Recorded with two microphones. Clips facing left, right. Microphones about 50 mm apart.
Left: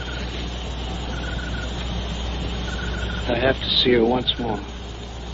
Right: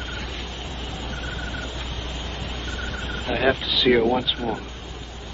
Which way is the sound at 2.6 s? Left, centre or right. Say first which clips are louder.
Left 1 dB; centre.